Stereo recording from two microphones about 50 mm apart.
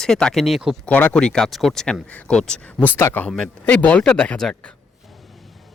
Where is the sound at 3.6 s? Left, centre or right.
Left.